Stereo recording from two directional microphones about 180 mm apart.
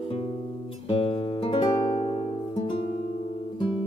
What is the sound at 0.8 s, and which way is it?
Music, 30° left (ahead or behind).